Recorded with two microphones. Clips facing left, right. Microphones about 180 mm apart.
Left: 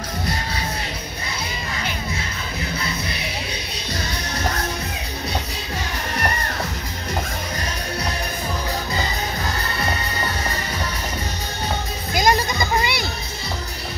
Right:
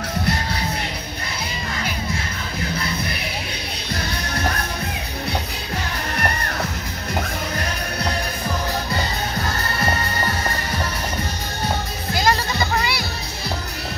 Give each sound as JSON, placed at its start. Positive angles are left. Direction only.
{"t": 12.2, "sound": "music", "side_deg": 15}